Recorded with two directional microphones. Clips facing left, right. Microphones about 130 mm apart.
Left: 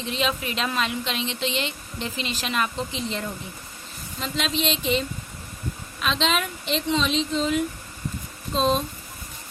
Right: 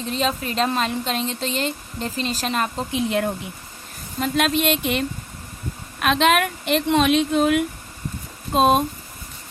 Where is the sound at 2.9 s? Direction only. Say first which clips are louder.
Right 8 dB; 60° right (ahead or behind).